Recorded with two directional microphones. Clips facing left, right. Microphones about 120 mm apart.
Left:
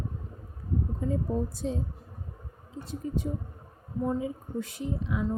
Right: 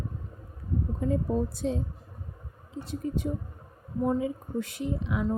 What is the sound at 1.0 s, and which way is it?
Speech, 70° right (ahead or behind).